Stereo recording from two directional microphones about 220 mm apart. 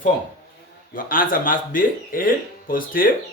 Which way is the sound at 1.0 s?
40° left (ahead or behind).